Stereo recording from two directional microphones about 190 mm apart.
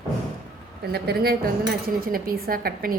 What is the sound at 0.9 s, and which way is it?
A woman's voice, 55° right (ahead or behind).